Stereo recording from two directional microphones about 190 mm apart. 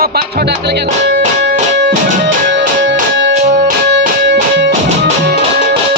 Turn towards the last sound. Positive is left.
turn(degrees=-65)  # may be behind; listen again after turning